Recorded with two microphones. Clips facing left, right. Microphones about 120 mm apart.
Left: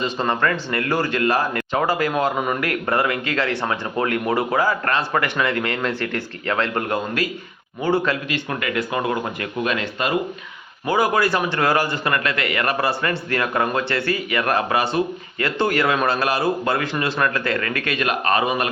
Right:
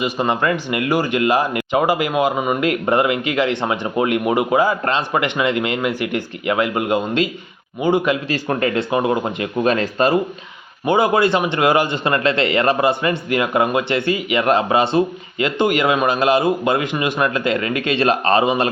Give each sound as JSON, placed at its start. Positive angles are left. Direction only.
{"t": 0.0, "sound": "speech", "side_deg": -15}
{"t": 2.6, "sound": "speech", "side_deg": -20}
{"t": 8.3, "sound": "a man's voice", "side_deg": -35}
{"t": 9.6, "sound": "speech", "side_deg": -40}
{"t": 10.8, "sound": "a man's voice", "side_deg": -25}